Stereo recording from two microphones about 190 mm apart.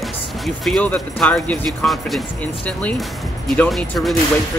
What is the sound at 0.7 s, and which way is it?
Speech, 5° left (ahead or behind).